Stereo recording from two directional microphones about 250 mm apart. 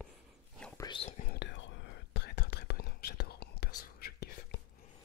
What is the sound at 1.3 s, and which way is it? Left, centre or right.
Whispering, left.